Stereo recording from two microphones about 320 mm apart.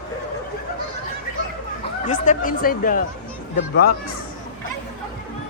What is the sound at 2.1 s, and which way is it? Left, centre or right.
Speech, left.